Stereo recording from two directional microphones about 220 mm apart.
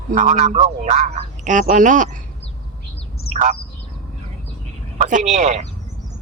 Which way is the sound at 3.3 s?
30° right (ahead or behind).